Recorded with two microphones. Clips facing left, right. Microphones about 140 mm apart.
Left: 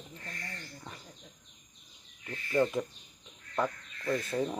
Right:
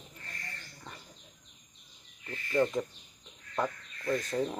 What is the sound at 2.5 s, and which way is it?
Speech, 5° left (ahead or behind).